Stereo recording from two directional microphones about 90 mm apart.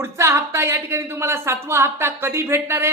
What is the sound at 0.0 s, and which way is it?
A woman's voice, 30° right (ahead or behind).